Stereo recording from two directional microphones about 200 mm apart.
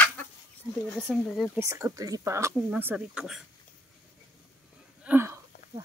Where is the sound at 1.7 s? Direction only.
15° right (ahead or behind).